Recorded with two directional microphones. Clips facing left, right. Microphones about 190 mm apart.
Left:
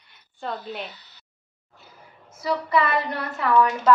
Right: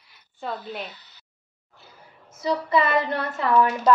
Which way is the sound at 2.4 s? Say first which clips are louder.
Right 1 dB; 25° right (ahead or behind).